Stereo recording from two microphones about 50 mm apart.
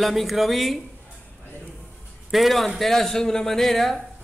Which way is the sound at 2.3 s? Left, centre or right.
Centre.